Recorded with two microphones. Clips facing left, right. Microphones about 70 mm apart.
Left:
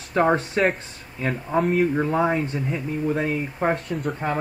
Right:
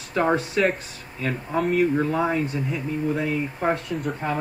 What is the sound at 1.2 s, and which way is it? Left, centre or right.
Speech, centre.